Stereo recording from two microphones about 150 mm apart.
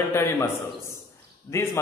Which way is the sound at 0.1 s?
20° left (ahead or behind).